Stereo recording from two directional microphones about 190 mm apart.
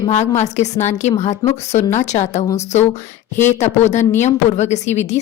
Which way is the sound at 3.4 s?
35° left (ahead or behind).